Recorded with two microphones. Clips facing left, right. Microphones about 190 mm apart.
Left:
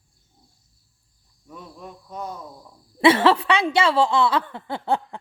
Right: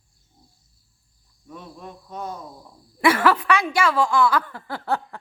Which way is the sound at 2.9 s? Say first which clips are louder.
Left 3 dB; 25° left (ahead or behind).